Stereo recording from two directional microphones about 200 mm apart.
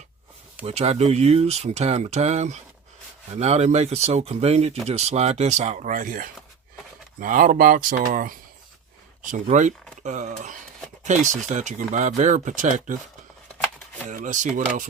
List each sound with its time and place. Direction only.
0.6 s speech: 30° right (ahead or behind)
11.5 s speech: 40° right (ahead or behind)
14.1 s speech: 40° right (ahead or behind)